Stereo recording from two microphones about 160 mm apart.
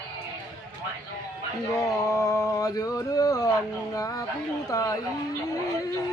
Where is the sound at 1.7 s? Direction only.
20° left (ahead or behind).